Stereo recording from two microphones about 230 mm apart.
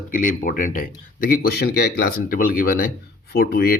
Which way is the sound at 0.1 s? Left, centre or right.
Left.